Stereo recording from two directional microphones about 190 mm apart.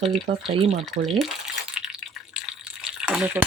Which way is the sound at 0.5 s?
30° right (ahead or behind).